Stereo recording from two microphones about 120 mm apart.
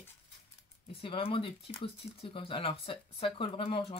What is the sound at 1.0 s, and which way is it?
Speech, 50° left (ahead or behind).